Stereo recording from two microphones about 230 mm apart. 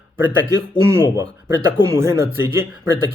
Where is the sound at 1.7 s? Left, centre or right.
Centre.